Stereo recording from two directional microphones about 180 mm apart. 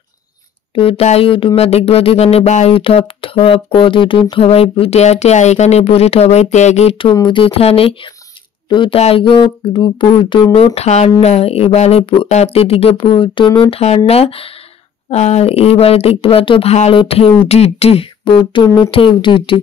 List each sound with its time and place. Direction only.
0.7 s speech: 30° left (ahead or behind)